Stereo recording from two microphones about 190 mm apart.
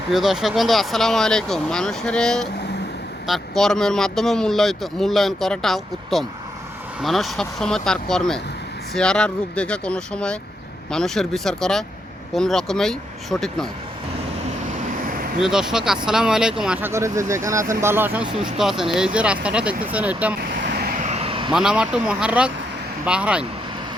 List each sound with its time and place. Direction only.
0.1 s speech: centre (ahead or behind)
15.4 s speech: centre (ahead or behind)
21.0 s vehicle: 35° right (ahead or behind)
21.5 s speech: 5° right (ahead or behind)